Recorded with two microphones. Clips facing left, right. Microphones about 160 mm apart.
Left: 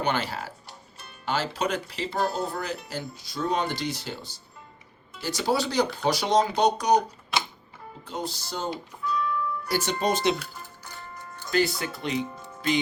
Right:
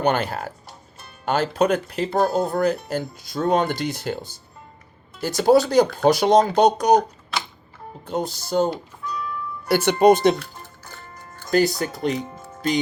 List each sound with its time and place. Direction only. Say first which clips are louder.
0.0 s speech: right 6 dB; 50° right (ahead or behind)
8.0 s speech: right 7 dB; 50° right (ahead or behind)
9.6 s speech: right 12 dB; 65° right (ahead or behind)
11.5 s speech: right 6 dB; 40° right (ahead or behind)